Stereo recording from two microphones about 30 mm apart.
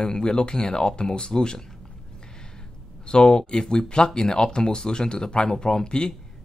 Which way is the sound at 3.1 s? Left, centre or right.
Left.